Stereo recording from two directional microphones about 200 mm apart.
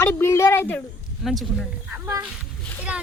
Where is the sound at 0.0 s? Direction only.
10° left (ahead or behind).